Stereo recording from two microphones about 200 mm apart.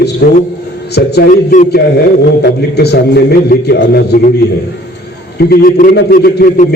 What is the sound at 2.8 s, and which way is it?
A man's voice, 55° left (ahead or behind).